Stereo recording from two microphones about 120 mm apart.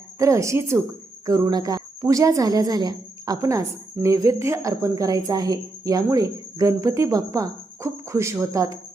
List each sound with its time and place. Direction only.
0.2 s speech: 25° right (ahead or behind)